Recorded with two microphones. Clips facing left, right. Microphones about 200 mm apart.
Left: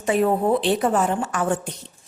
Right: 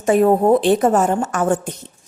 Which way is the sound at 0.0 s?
45° right (ahead or behind).